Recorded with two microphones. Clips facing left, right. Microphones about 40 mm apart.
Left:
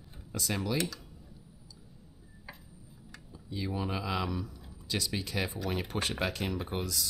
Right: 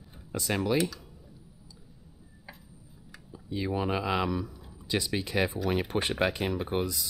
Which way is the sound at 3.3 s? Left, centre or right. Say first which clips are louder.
Right 5 dB; right.